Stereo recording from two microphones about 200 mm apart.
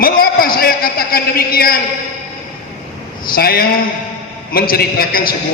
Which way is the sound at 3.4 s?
50° left (ahead or behind).